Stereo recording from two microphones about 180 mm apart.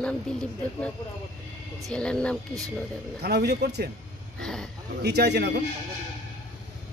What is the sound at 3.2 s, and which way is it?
Speech, 65° right (ahead or behind).